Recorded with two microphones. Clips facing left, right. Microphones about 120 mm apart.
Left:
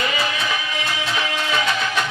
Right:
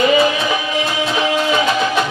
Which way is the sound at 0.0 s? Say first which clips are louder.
Right 10 dB; 20° right (ahead or behind).